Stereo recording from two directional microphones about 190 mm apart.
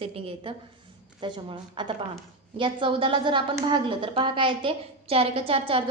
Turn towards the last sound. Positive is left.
turn(degrees=-30)  # may be behind; listen again after turning